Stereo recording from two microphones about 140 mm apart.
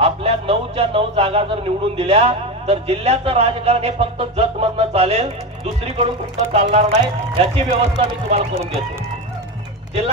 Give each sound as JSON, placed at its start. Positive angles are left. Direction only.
{"t": 0.0, "sound": "speech", "side_deg": -45}